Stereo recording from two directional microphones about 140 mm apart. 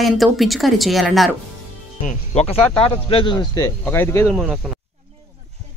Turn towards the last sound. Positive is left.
turn(degrees=-5)  # may be behind; listen again after turning